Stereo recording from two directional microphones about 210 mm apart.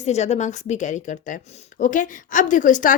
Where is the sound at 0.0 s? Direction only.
30° left (ahead or behind).